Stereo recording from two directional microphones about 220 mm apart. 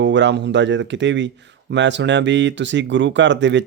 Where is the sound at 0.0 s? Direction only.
55° right (ahead or behind).